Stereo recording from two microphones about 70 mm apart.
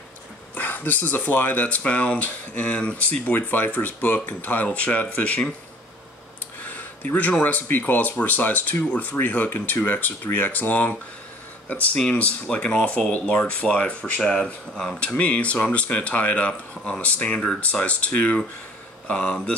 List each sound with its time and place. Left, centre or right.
0.6 s speech: left
6.6 s a sound: left
7.7 s speech: left